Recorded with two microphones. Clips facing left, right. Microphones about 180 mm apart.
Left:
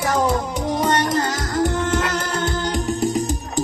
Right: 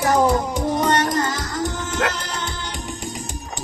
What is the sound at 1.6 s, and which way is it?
Music, 60° left (ahead or behind).